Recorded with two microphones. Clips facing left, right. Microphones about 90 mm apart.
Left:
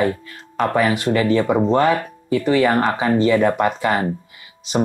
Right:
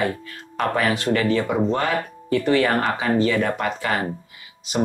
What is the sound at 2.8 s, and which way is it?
Speech, 20° left (ahead or behind).